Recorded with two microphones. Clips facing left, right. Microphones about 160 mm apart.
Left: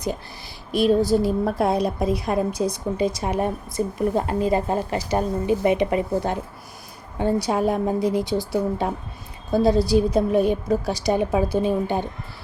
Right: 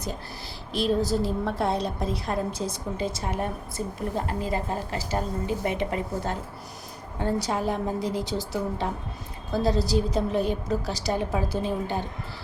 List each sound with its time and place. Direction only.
0.7 s a woman's voice: 10° left (ahead or behind)